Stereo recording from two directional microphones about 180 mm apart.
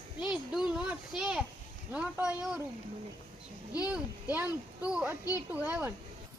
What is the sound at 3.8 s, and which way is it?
Speech, 10° right (ahead or behind).